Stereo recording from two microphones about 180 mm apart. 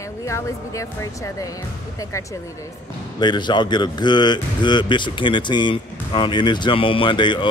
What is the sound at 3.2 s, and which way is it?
Speech, 25° left (ahead or behind).